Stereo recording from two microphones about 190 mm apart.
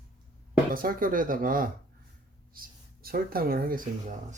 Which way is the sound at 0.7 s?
50° right (ahead or behind).